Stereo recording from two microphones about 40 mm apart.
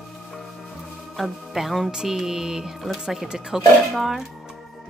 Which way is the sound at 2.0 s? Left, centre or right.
Centre.